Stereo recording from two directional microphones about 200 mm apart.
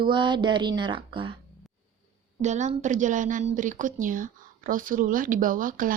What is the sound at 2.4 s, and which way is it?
A woman's voice, 35° right (ahead or behind).